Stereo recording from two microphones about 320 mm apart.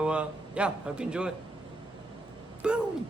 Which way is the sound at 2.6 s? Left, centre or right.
Centre.